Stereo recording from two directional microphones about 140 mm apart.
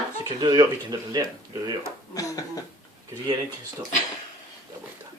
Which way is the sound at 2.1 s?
25° left (ahead or behind).